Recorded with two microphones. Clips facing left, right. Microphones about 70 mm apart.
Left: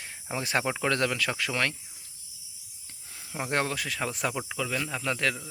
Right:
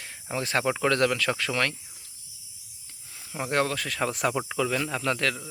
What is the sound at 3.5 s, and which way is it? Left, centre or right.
Speech, left.